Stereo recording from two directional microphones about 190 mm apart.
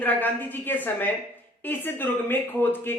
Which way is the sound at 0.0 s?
10° left (ahead or behind).